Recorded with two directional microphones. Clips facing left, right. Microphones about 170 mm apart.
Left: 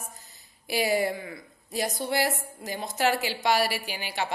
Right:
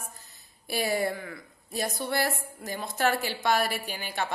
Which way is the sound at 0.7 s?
20° left (ahead or behind).